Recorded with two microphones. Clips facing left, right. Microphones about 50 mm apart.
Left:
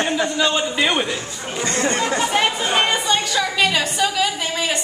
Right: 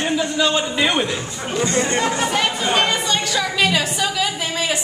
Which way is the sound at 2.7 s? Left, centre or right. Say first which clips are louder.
Left 1 dB; centre.